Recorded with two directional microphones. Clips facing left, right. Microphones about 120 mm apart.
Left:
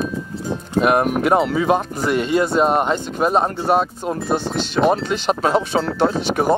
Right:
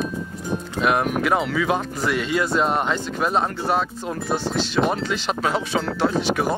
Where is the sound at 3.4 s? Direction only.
20° left (ahead or behind).